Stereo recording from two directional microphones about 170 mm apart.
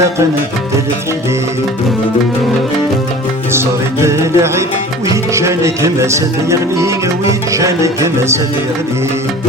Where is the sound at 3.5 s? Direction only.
15° right (ahead or behind).